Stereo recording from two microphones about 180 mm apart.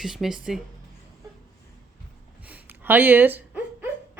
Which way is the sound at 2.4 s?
10° right (ahead or behind).